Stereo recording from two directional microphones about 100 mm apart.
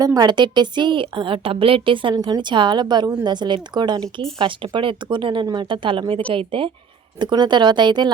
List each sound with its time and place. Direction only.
0.0 s a woman's voice: 40° right (ahead or behind); by 2.1 s 55° right (ahead or behind)
2.1 s a woman's voice: 45° right (ahead or behind); by 6.7 s 60° right (ahead or behind)
7.2 s a woman's voice: 50° right (ahead or behind)